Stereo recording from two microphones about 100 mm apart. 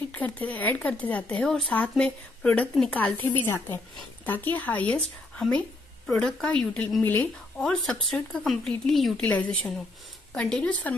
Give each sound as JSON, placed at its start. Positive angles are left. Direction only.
{"t": 0.1, "sound": "speech", "side_deg": 15}
{"t": 6.1, "sound": "speech", "side_deg": 10}
{"t": 9.2, "sound": "speech", "side_deg": 15}